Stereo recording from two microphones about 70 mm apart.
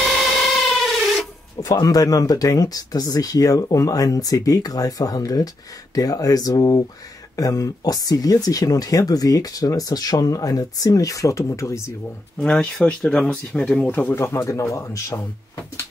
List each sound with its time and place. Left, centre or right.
0.0 s printer: centre
1.6 s speech: left
12.4 s speech: centre
14.1 s speech: left